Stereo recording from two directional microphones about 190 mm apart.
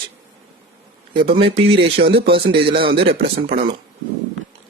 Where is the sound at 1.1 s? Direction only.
25° right (ahead or behind).